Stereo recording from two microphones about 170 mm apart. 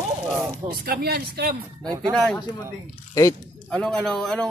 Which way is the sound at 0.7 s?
65° right (ahead or behind).